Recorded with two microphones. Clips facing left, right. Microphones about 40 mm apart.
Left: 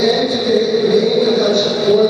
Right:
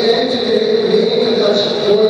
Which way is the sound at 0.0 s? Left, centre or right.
Centre.